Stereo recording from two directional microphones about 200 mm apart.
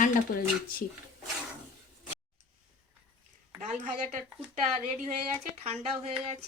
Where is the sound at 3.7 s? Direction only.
35° right (ahead or behind).